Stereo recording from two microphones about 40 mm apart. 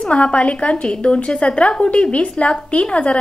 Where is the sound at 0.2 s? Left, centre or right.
Left.